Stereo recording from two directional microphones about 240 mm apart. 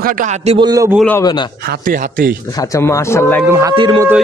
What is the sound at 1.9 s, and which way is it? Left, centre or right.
Speech, right.